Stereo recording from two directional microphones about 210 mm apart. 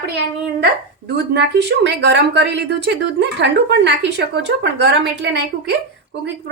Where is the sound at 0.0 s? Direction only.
55° right (ahead or behind).